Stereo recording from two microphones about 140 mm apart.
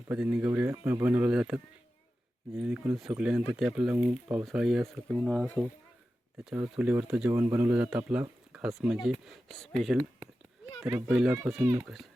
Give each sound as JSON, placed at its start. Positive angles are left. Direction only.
{"t": 0.1, "sound": "speech", "side_deg": -10}
{"t": 2.6, "sound": "speech", "side_deg": -10}
{"t": 6.4, "sound": "speech", "side_deg": -5}
{"t": 10.8, "sound": "speech", "side_deg": -10}